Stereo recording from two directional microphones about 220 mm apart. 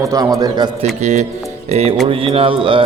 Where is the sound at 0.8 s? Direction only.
30° right (ahead or behind).